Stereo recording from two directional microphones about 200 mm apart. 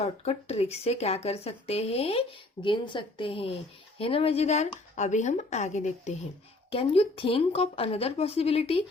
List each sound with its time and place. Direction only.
0.0 s a woman's voice: 30° left (ahead or behind)